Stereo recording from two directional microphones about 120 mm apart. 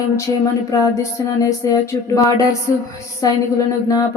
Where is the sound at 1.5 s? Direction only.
25° left (ahead or behind).